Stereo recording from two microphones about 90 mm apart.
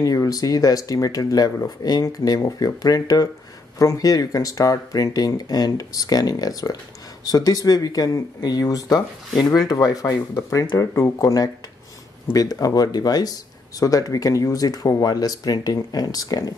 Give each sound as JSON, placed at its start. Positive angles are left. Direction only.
{"t": 0.0, "sound": "speech", "side_deg": 45}